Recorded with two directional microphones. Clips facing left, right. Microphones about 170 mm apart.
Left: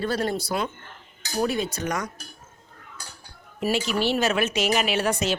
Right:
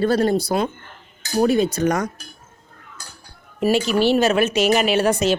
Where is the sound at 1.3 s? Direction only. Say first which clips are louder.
Right 8 dB; 40° right (ahead or behind).